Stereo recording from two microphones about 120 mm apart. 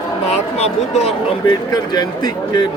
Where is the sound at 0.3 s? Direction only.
65° left (ahead or behind).